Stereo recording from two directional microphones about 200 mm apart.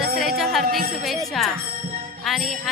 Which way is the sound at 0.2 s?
Centre (ahead or behind).